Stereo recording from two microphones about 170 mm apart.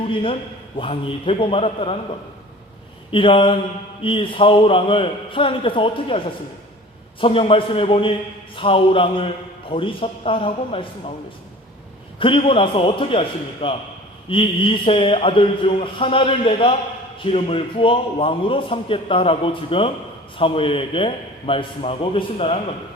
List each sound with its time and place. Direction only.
0.0 s a man's voice: 30° left (ahead or behind)
3.1 s a man's voice: 30° left (ahead or behind)
12.2 s a man's voice: 30° left (ahead or behind)